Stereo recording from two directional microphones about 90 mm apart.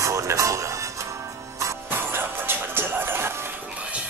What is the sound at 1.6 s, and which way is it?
Music, 25° right (ahead or behind).